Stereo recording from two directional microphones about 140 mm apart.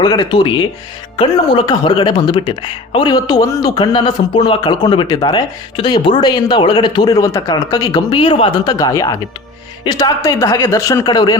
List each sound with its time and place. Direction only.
0.0 s speech: 30° left (ahead or behind)
8.6 s speech: 25° left (ahead or behind)